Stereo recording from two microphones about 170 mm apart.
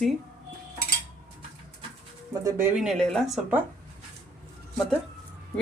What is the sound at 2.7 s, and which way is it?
Speech, centre (ahead or behind).